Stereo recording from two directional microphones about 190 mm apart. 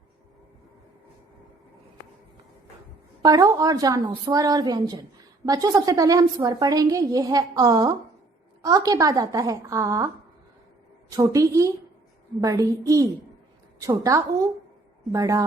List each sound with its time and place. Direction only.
3.2 s a woman's voice: 20° right (ahead or behind)
11.2 s a woman's voice: 15° right (ahead or behind)